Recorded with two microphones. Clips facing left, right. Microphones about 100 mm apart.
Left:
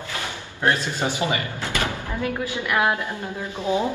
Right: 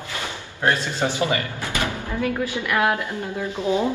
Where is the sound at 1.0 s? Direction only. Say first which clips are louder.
Right 2 dB; 20° left (ahead or behind).